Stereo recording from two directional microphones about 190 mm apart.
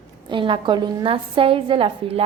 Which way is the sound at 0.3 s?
25° right (ahead or behind).